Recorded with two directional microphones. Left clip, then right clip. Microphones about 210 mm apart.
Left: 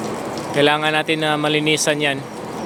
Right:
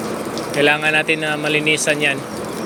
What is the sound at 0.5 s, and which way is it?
Speech, 25° left (ahead or behind).